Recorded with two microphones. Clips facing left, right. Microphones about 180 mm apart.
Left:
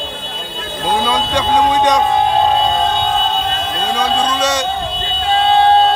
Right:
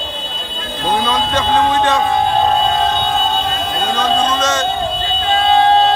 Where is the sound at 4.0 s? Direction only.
10° left (ahead or behind).